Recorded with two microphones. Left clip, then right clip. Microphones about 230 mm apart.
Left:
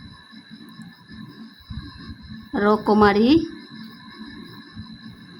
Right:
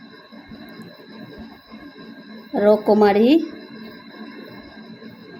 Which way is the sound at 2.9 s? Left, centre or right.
Left.